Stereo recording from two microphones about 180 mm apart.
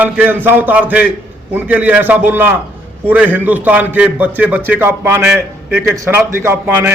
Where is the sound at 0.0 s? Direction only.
10° right (ahead or behind).